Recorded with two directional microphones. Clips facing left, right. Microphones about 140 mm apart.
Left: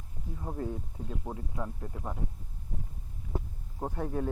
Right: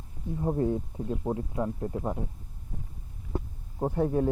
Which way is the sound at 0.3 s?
25° right (ahead or behind).